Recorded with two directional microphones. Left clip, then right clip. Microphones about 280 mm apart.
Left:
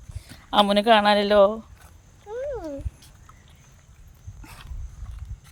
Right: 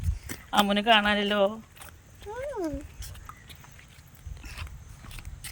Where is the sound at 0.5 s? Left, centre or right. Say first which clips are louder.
Left 4 dB; centre.